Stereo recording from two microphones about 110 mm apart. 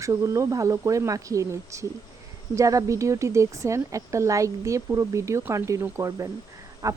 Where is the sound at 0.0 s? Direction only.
30° right (ahead or behind).